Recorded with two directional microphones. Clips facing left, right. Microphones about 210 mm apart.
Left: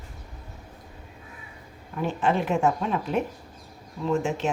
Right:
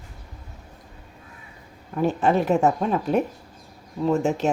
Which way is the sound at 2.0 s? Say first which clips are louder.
Right 4 dB; 40° right (ahead or behind).